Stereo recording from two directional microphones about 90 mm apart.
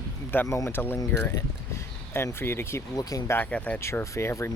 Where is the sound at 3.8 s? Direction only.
30° left (ahead or behind).